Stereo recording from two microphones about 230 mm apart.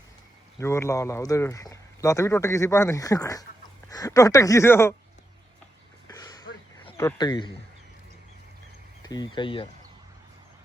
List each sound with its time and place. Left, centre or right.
0.6 s speech: centre
6.1 s a sound: centre
6.8 s speech: centre
9.0 s speech: centre